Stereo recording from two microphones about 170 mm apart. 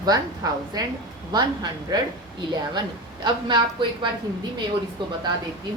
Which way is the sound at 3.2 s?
25° right (ahead or behind).